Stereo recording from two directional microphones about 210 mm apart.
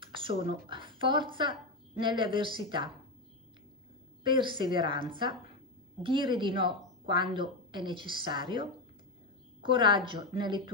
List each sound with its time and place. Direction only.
0.0 s a woman's voice: 25° right (ahead or behind)
4.2 s a woman's voice: 25° right (ahead or behind)